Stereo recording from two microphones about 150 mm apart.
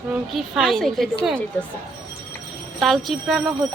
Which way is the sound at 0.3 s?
Centre (ahead or behind).